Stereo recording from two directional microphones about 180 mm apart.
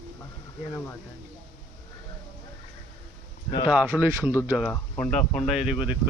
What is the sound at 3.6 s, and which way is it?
Speech, 10° right (ahead or behind).